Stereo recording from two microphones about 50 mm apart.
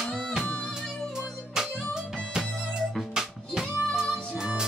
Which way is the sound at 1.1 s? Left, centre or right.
Centre.